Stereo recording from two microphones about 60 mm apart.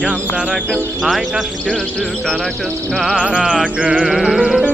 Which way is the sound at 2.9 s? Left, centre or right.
Centre.